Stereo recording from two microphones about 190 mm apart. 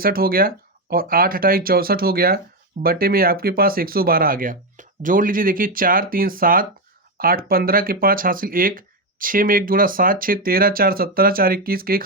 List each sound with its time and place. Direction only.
0.0 s speech: 50° right (ahead or behind)